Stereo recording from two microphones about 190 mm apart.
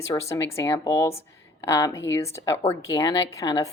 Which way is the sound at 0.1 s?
15° left (ahead or behind).